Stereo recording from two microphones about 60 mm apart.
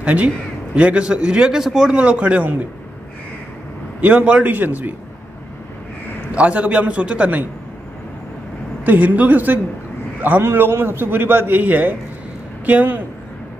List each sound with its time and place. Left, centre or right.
0.0 s a man's voice: right; by 1.9 s centre
1.9 s a man's voice: right
4.0 s a man's voice: right
6.3 s a man's voice: right
8.8 s a man's voice: right